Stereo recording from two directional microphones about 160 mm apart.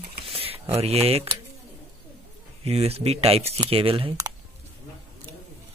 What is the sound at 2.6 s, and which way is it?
Speech, 40° right (ahead or behind).